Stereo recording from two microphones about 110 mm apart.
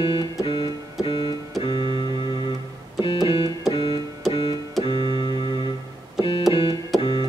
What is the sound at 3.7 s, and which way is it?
Keyboard, 55° left (ahead or behind).